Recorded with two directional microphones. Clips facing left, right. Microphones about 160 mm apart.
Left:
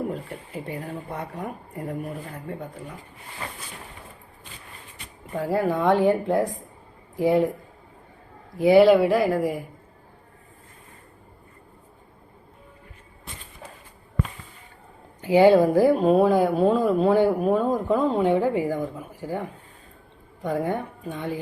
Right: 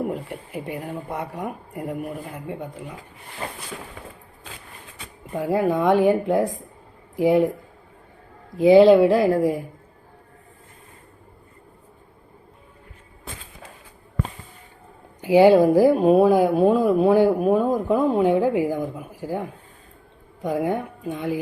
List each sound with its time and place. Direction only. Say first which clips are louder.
0.1 s speech: right 3 dB; 15° right (ahead or behind)
5.3 s speech: right 2 dB; 15° right (ahead or behind)
8.5 s speech: right 3 dB; 20° right (ahead or behind)
15.2 s speech: right 2 dB; 15° right (ahead or behind)
20.4 s speech: right 2 dB; 15° right (ahead or behind)